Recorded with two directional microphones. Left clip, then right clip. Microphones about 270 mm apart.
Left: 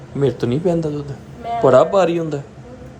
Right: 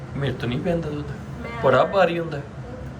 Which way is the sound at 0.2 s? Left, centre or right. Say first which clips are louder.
Left 9 dB; centre.